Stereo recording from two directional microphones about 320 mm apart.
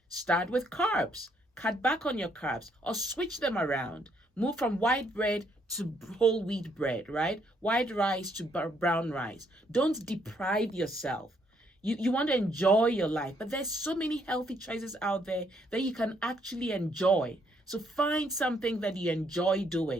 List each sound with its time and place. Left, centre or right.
0.3 s speech: centre